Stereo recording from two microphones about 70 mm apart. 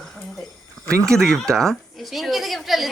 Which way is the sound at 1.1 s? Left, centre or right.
Centre.